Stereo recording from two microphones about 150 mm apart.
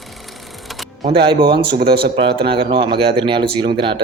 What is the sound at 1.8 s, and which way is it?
Speech, 90° right.